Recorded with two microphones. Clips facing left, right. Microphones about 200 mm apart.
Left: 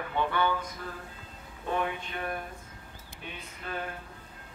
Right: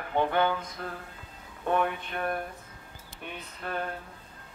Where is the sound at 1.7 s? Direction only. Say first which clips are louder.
Right 4 dB; 55° right (ahead or behind).